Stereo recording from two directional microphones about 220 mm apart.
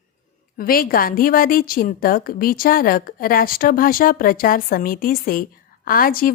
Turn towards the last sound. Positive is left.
turn(degrees=40)  # may be behind; listen again after turning